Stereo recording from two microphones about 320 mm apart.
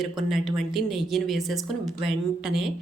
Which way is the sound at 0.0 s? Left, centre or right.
Centre.